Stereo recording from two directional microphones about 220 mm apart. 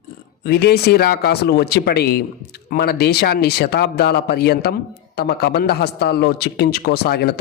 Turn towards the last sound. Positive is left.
turn(degrees=45)  # may be behind; listen again after turning